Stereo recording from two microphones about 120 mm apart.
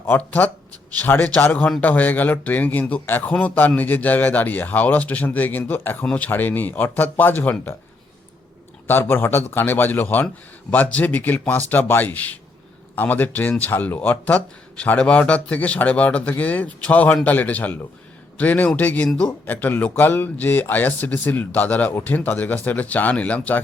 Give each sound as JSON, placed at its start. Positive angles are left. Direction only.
{"t": 0.0, "sound": "speech", "side_deg": 15}
{"t": 8.9, "sound": "speech", "side_deg": 20}